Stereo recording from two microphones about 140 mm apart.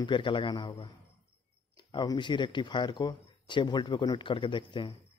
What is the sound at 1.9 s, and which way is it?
A man's voice, 30° left (ahead or behind).